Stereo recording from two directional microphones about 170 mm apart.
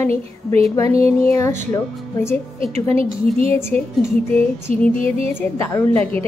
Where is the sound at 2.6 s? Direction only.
35° right (ahead or behind).